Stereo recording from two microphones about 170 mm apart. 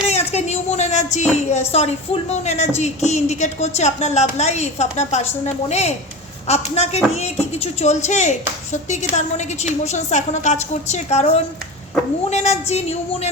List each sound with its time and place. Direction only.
0.1 s speech: 40° left (ahead or behind)